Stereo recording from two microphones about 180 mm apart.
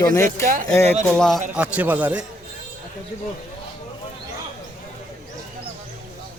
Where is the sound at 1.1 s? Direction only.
5° left (ahead or behind).